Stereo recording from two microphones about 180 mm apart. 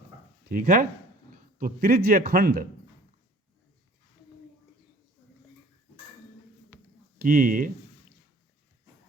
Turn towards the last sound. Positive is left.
turn(degrees=-50)  # may be behind; listen again after turning